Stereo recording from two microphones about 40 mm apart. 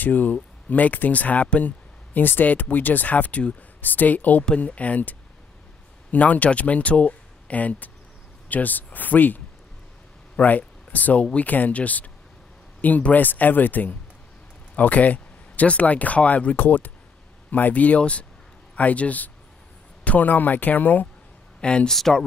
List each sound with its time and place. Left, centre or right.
0.0 s speech: left
2.1 s speech: left
3.8 s speech: left
6.1 s speech: left
16.5 s speech: left
21.5 s speech: left
21.8 s speech: centre